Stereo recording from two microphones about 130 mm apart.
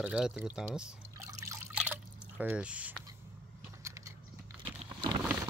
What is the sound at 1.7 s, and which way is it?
Drip, 10° right (ahead or behind).